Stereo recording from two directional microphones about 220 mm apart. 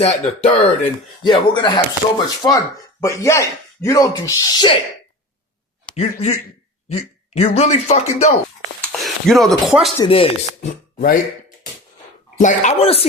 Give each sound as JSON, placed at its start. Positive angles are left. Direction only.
{"t": 0.0, "sound": "speech", "side_deg": 30}
{"t": 5.8, "sound": "speech", "side_deg": 25}
{"t": 8.9, "sound": "speech", "side_deg": 0}
{"t": 10.0, "sound": "speech", "side_deg": 25}
{"t": 12.4, "sound": "speech", "side_deg": 35}